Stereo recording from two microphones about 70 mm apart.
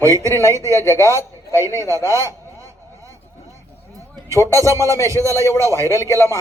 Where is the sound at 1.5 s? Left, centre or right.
Right.